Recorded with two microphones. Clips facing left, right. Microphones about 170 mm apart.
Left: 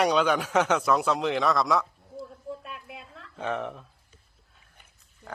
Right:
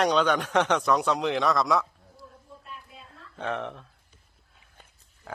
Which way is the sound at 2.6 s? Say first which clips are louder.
Left 4 dB; 80° left.